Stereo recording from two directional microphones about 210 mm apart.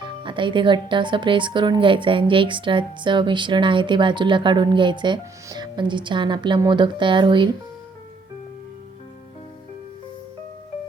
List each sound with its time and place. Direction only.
0.2 s speech: 25° right (ahead or behind)